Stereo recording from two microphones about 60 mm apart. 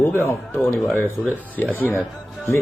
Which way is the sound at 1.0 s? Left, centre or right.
Left.